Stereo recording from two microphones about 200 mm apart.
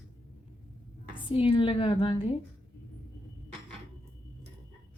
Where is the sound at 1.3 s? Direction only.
25° left (ahead or behind).